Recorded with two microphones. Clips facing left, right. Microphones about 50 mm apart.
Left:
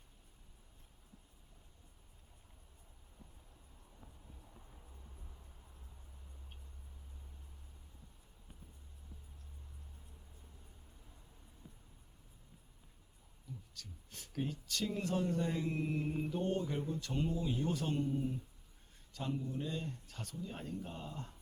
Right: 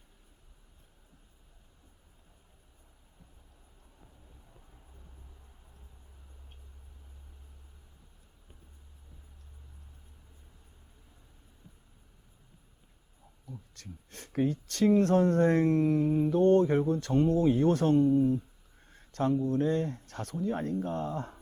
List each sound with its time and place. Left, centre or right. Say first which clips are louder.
13.4 s speech: right 4 dB; right